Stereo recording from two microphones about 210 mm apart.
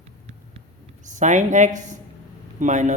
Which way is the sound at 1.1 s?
35° right (ahead or behind).